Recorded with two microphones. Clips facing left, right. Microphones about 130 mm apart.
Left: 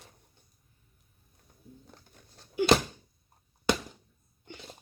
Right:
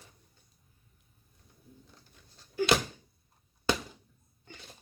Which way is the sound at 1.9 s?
50° left (ahead or behind).